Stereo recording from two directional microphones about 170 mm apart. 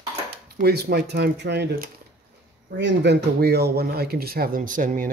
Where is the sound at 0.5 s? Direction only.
70° right (ahead or behind).